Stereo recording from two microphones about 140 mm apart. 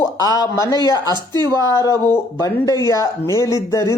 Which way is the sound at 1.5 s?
25° left (ahead or behind).